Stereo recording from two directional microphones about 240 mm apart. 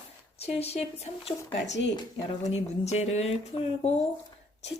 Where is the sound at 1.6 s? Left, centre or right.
Left.